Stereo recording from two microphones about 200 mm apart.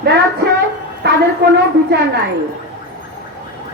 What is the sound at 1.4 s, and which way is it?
Speech, 60° right (ahead or behind).